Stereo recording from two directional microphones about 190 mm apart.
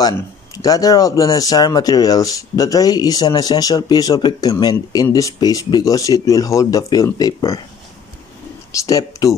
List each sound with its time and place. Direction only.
0.0 s speech: 20° left (ahead or behind)
8.8 s speech: 15° left (ahead or behind)